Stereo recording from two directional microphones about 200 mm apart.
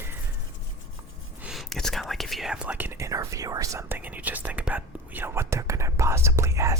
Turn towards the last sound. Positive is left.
turn(degrees=-15)  # may be behind; listen again after turning